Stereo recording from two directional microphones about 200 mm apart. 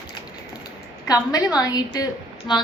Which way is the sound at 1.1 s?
20° left (ahead or behind).